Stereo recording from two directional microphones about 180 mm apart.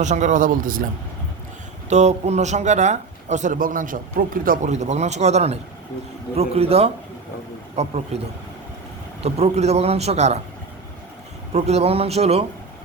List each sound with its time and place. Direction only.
0.0 s speech: 40° right (ahead or behind)
1.9 s a man's voice: 40° right (ahead or behind)
9.2 s a man's voice: 35° right (ahead or behind)
11.5 s a man's voice: 35° right (ahead or behind)